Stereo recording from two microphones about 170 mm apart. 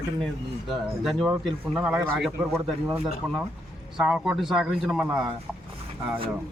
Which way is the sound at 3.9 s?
5° right (ahead or behind).